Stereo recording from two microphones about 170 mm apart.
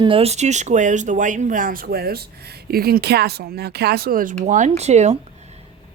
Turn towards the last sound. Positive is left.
turn(degrees=-40)  # may be behind; listen again after turning